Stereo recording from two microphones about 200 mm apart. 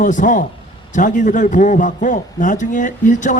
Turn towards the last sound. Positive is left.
turn(degrees=40)  # may be behind; listen again after turning